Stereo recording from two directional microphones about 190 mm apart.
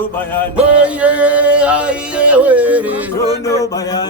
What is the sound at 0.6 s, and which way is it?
Music, 5° right (ahead or behind).